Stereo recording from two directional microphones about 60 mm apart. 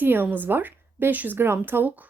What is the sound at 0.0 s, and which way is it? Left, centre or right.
A woman's voice, right.